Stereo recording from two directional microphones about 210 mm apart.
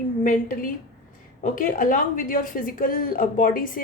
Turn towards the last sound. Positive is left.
turn(degrees=40)  # may be behind; listen again after turning